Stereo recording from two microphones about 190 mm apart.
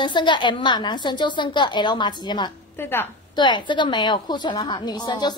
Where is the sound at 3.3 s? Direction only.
25° left (ahead or behind).